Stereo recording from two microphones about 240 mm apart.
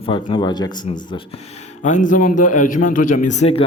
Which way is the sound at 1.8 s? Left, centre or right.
Left.